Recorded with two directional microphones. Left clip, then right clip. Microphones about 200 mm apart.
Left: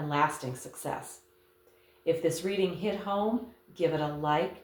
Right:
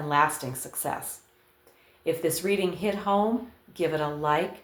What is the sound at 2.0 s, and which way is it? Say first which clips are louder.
Speech: right 2 dB; 45° right (ahead or behind).